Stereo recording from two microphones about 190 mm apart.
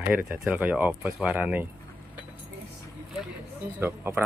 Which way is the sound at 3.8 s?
10° right (ahead or behind).